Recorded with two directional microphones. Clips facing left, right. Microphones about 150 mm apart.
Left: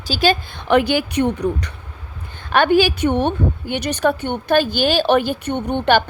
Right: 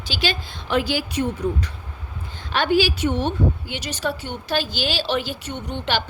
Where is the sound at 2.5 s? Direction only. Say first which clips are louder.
Left 5 dB; 55° left (ahead or behind).